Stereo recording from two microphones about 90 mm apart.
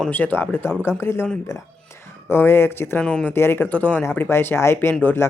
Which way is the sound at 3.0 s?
10° left (ahead or behind).